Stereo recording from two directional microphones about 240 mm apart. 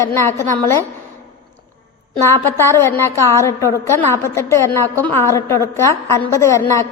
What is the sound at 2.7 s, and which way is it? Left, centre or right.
A woman's voice, centre.